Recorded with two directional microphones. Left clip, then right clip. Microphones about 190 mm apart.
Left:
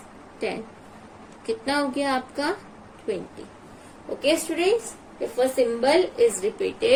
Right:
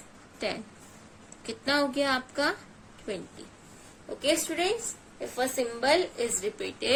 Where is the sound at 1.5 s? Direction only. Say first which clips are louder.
Left 3 dB; 55° right (ahead or behind).